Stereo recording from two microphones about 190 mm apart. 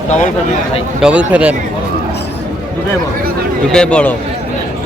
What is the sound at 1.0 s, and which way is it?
Speech, 5° right (ahead or behind).